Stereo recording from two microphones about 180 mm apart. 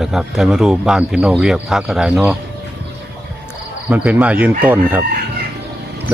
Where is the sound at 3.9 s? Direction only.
10° right (ahead or behind).